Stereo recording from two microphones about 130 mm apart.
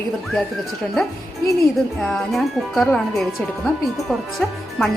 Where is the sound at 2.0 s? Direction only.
5° left (ahead or behind).